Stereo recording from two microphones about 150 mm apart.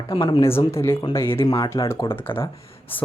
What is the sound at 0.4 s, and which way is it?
Speech, 15° left (ahead or behind).